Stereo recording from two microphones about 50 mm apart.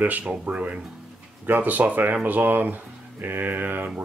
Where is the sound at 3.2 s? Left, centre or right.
Right.